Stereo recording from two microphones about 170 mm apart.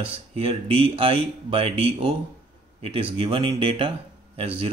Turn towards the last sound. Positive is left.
turn(degrees=-35)  # may be behind; listen again after turning